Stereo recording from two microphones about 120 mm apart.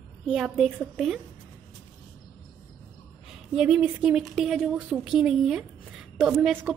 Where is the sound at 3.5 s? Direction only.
5° right (ahead or behind).